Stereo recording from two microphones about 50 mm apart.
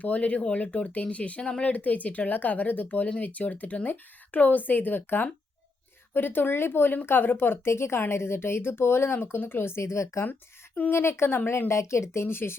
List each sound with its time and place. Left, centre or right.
0.0 s speech: left
1.7 s speech: left
10.8 s speech: left
11.0 s speech: left